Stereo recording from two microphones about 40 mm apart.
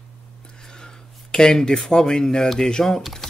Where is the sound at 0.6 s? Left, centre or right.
Centre.